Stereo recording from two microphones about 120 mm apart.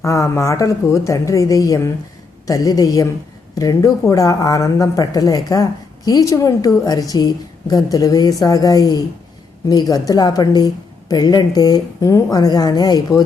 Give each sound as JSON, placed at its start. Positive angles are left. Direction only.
{"t": 0.0, "sound": "a woman's voice", "side_deg": 25}